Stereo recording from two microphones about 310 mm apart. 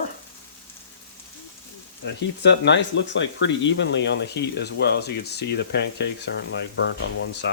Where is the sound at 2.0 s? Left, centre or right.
Left.